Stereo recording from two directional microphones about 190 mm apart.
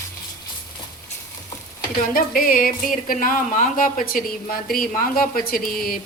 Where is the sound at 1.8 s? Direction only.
50° left (ahead or behind).